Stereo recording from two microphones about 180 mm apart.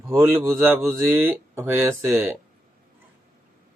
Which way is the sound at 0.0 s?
15° right (ahead or behind).